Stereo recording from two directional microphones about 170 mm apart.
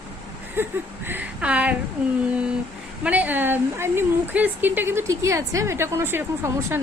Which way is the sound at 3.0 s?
10° right (ahead or behind).